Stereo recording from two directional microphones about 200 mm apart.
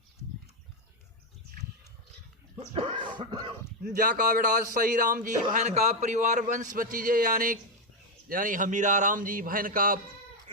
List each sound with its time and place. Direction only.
2.6 s throat clearing: 25° right (ahead or behind)
3.8 s a man's voice: 45° right (ahead or behind)